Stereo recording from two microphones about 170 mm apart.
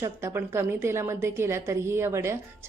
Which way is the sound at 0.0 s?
15° right (ahead or behind).